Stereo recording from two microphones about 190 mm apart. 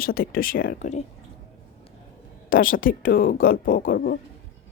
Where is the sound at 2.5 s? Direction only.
45° left (ahead or behind).